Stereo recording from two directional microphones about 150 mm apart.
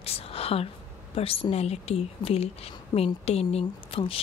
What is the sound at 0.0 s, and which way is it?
A woman's voice, 40° left (ahead or behind).